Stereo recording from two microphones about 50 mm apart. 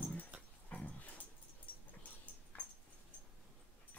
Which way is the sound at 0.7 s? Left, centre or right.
Left.